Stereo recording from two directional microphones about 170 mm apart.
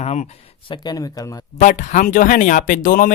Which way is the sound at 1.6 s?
45° left (ahead or behind).